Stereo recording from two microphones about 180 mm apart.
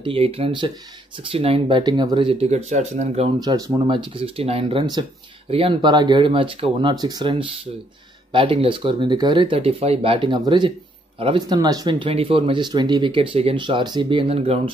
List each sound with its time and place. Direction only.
0.0 s speech: 30° right (ahead or behind)
2.4 s speech: 40° right (ahead or behind)
3.3 s speech: 20° right (ahead or behind)